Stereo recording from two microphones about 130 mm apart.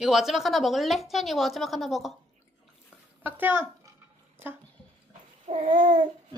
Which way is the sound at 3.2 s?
15° right (ahead or behind).